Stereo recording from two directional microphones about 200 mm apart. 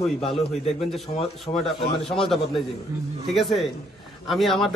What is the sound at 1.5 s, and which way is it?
Speech, 30° left (ahead or behind).